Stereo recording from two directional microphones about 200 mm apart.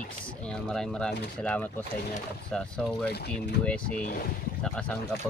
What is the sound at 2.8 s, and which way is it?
Speech, centre (ahead or behind).